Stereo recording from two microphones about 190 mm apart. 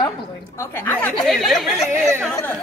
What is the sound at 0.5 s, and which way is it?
Speech, 15° left (ahead or behind).